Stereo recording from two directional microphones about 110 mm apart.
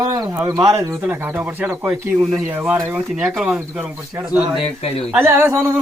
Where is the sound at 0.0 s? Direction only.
35° right (ahead or behind).